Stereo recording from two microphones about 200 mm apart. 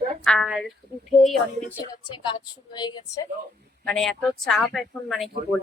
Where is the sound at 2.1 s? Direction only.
25° left (ahead or behind).